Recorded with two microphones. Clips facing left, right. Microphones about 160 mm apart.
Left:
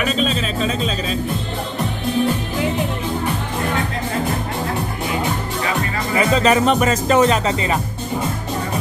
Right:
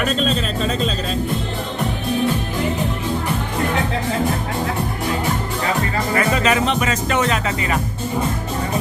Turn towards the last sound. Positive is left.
turn(degrees=30)  # may be behind; listen again after turning